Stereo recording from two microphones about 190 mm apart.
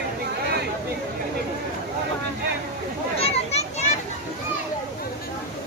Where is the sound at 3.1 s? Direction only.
35° left (ahead or behind).